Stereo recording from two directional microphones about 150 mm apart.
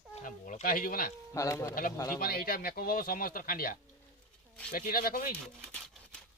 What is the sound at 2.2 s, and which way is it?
Speech, 85° left.